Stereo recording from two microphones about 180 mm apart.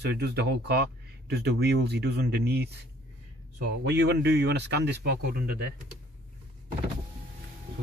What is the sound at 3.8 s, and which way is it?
Speech, 70° right (ahead or behind).